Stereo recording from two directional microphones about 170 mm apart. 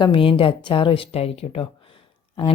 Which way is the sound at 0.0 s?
30° left (ahead or behind).